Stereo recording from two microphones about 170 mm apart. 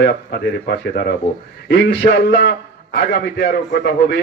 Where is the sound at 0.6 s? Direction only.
65° left (ahead or behind).